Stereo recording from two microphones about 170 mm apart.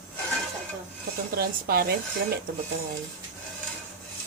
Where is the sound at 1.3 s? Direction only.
65° right (ahead or behind).